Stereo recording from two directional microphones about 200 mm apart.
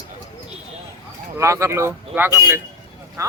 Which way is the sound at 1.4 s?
15° right (ahead or behind).